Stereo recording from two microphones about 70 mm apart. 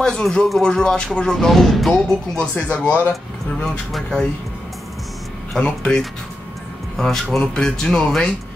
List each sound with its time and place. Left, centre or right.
0.0 s speech: centre
3.9 s speech: centre
5.6 s speech: centre